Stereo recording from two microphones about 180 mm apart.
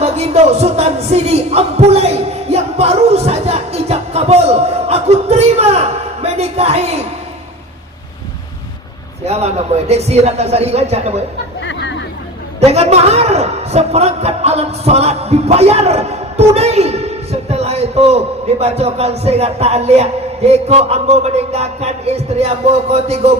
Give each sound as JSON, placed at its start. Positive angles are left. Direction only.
{"t": 0.0, "sound": "a sound", "side_deg": -35}
{"t": 9.2, "sound": "a man's voice", "side_deg": -35}
{"t": 11.6, "sound": "chatter", "side_deg": 90}
{"t": 12.5, "sound": "a man's voice", "side_deg": -35}